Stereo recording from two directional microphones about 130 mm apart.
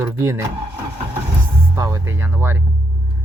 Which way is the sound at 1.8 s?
25° right (ahead or behind).